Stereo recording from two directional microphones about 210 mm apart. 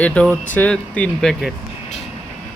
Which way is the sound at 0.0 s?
5° left (ahead or behind).